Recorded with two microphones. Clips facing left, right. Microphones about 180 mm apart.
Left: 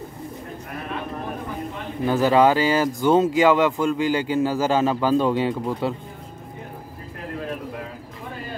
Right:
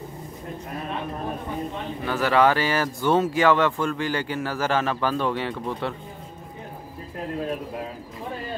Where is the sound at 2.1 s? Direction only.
15° left (ahead or behind).